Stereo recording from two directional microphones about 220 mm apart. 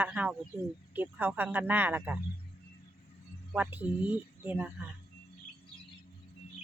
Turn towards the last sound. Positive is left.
turn(degrees=-5)  # may be behind; listen again after turning